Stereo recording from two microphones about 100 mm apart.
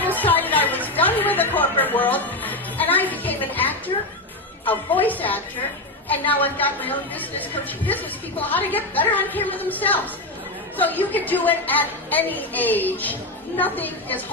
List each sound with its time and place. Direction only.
0.2 s music: 20° left (ahead or behind)
4.6 s a woman's voice: 15° left (ahead or behind)